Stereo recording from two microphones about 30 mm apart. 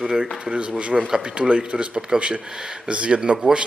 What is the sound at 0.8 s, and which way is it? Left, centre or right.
Speech, right.